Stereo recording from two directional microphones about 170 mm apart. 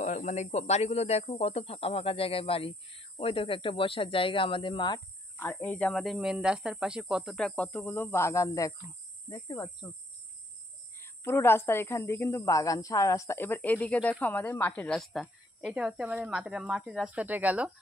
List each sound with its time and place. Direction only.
0.0 s speech: 45° left (ahead or behind); by 5.0 s 25° left (ahead or behind)
5.4 s speech: 10° left (ahead or behind)
11.0 s a woman's voice: 15° left (ahead or behind); by 17.6 s 10° right (ahead or behind)